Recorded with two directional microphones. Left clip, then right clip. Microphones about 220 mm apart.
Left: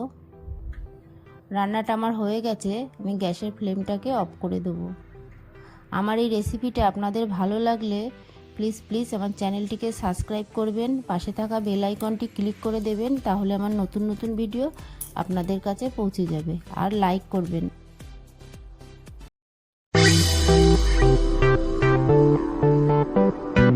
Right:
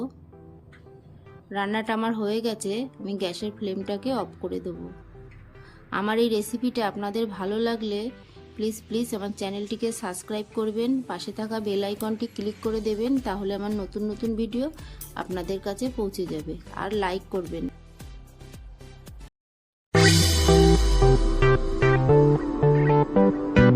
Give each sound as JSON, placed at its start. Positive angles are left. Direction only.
{"t": 1.5, "sound": "a woman's voice", "side_deg": 30}
{"t": 5.9, "sound": "a woman's voice", "side_deg": 35}
{"t": 20.5, "sound": "music", "side_deg": -10}